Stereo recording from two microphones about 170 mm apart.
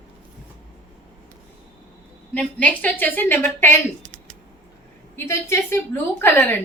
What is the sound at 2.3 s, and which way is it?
A woman's voice, 10° left (ahead or behind).